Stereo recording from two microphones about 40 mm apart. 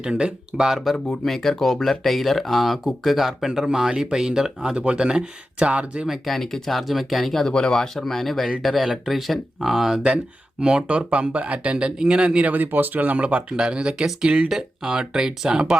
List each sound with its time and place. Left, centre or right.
0.0 s speech: right
0.9 s speech: centre
4.7 s speech: right
6.2 s speech: centre
7.4 s speech: centre
10.6 s speech: right
12.4 s speech: right
13.6 s speech: right